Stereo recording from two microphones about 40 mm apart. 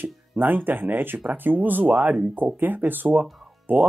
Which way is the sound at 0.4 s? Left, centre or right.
Right.